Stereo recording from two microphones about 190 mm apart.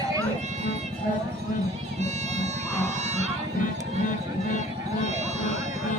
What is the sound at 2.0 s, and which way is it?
Run, 35° right (ahead or behind).